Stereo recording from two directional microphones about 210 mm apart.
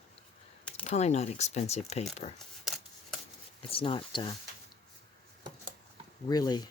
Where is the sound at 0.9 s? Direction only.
30° left (ahead or behind).